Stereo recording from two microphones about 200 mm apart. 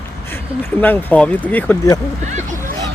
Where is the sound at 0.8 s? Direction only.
10° left (ahead or behind).